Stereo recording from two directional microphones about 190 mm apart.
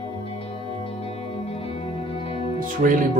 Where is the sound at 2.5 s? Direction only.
45° right (ahead or behind).